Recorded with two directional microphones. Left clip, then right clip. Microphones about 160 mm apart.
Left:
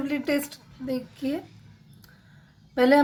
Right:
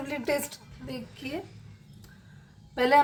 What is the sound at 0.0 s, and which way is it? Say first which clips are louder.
A woman's voice: left 3 dB; 20° left (ahead or behind).